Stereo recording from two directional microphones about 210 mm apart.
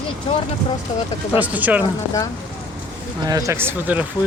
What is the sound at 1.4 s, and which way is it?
Speech, 5° right (ahead or behind).